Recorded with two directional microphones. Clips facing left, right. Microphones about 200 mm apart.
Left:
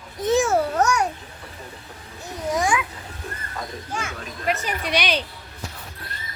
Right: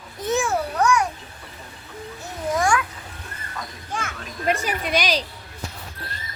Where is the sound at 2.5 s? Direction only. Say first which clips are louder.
Right 1 dB; 5° left (ahead or behind).